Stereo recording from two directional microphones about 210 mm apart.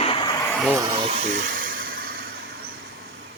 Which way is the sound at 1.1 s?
35° right (ahead or behind).